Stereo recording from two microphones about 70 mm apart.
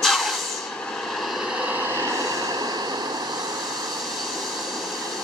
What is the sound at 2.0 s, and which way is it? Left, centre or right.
Vehicle, right.